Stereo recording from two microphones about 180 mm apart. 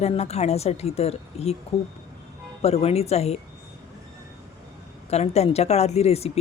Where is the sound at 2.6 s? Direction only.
35° left (ahead or behind).